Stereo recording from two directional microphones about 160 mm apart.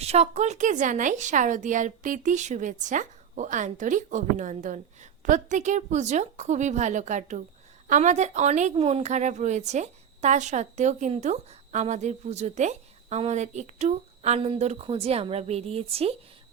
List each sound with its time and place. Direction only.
0.0 s a woman's voice: 40° right (ahead or behind)